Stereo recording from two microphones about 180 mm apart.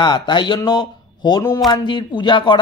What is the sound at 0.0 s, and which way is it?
Speech, 25° left (ahead or behind).